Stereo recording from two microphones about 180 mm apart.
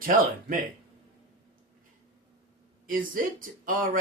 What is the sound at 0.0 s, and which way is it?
Speech, 50° right (ahead or behind).